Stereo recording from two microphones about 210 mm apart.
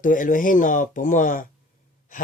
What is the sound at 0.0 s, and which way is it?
Speech, 40° left (ahead or behind).